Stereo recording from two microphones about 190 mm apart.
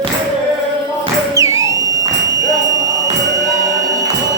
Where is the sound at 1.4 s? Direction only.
15° right (ahead or behind).